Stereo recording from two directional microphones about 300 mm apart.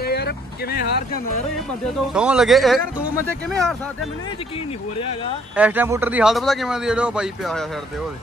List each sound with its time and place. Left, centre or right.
0.0 s vehicle: left
2.1 s a man's voice: centre
5.6 s a man's voice: centre